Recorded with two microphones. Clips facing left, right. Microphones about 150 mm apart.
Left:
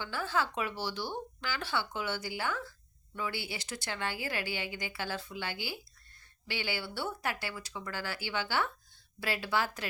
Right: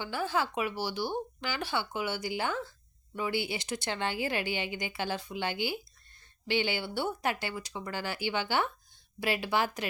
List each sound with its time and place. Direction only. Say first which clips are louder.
0.0 s a woman's voice: right 2 dB; 15° right (ahead or behind)